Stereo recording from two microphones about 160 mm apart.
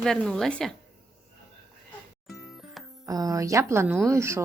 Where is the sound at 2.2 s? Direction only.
Centre (ahead or behind).